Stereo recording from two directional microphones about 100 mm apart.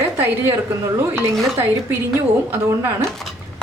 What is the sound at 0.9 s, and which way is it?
Speech, 25° right (ahead or behind).